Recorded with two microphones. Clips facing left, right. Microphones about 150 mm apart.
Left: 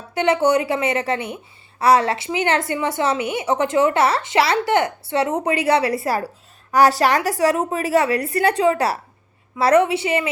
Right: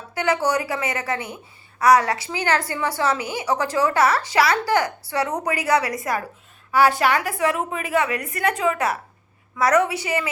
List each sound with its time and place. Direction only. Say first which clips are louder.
0.1 s a woman's voice: left 5 dB; 25° left (ahead or behind)